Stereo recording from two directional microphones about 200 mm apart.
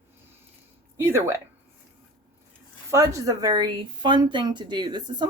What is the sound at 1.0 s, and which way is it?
Speech, 15° right (ahead or behind).